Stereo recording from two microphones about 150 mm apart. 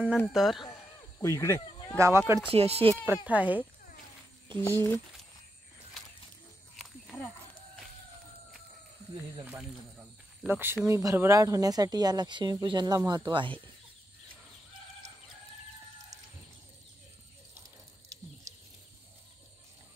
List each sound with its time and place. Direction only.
0.3 s speech: centre (ahead or behind)
1.2 s speech: 20° left (ahead or behind)
2.0 s speech: 20° right (ahead or behind)
2.5 s speech: 40° right (ahead or behind)
3.3 s speech: 10° right (ahead or behind)
4.6 s speech: 15° left (ahead or behind)
6.8 s a sound: 5° left (ahead or behind)
10.4 s speech: 15° right (ahead or behind); by 13.6 s 35° right (ahead or behind)